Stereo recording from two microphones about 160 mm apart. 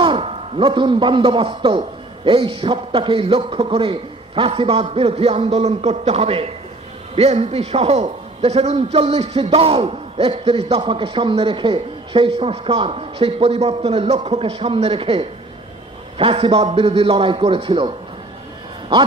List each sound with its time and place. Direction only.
0.0 s a man's voice: 35° right (ahead or behind)